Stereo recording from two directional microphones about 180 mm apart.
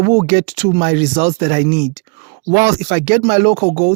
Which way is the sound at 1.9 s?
40° right (ahead or behind).